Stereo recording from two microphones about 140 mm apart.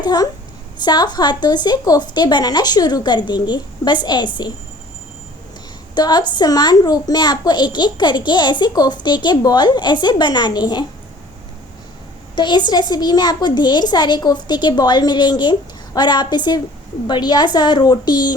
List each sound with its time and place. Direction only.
0.0 s a child's voice: 30° left (ahead or behind)
5.9 s a child's voice: 30° left (ahead or behind)
12.4 s a child's voice: 30° left (ahead or behind)